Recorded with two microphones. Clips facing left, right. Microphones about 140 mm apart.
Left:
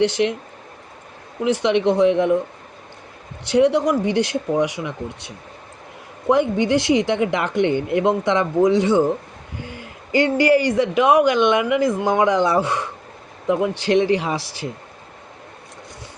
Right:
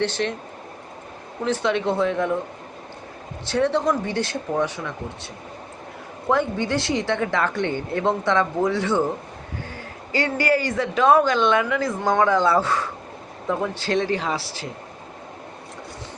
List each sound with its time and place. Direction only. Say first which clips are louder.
0.0 s speech: left 6 dB; 15° left (ahead or behind)
1.5 s speech: left 5 dB; 15° left (ahead or behind)
3.4 s speech: left 5 dB; 15° left (ahead or behind)